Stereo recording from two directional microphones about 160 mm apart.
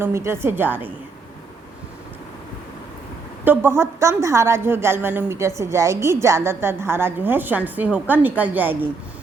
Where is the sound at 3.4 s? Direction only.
15° right (ahead or behind).